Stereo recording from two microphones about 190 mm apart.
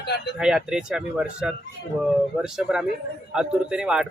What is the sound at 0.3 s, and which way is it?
Speech, 5° right (ahead or behind).